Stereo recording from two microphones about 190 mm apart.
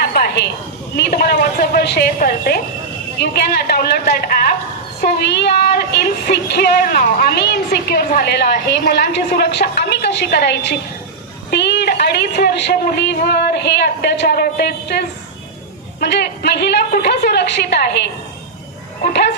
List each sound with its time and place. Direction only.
0.0 s a sound: 55° left (ahead or behind)
0.9 s a woman's voice: 55° left (ahead or behind)
16.0 s speech: 60° left (ahead or behind)